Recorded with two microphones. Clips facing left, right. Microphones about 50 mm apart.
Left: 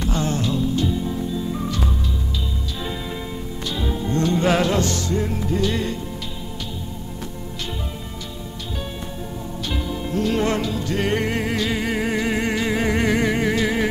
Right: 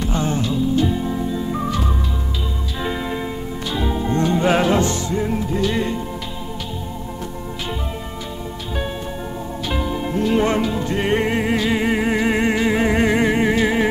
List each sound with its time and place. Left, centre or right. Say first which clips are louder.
0.1 s music: right 2 dB; centre
0.4 s music: right 3 dB; centre
0.8 s music: right 3 dB; right
2.8 s music: right 7 dB; right; by 5.8 s centre
9.7 s music: right 4 dB; centre